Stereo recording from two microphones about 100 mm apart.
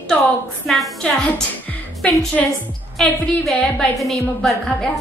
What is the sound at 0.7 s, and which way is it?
A woman's voice, centre (ahead or behind).